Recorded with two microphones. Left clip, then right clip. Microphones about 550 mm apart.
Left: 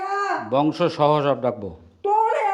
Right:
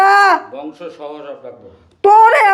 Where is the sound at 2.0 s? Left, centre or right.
Right.